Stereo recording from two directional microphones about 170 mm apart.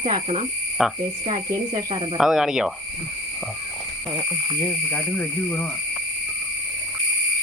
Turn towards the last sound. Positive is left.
turn(degrees=10)  # may be behind; listen again after turning